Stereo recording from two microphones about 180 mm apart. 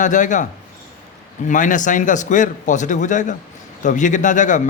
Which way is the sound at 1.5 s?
45° left (ahead or behind).